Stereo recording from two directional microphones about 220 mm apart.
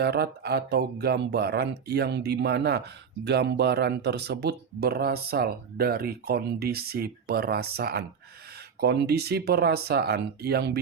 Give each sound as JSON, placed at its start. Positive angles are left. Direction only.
{"t": 0.0, "sound": "speech", "side_deg": -50}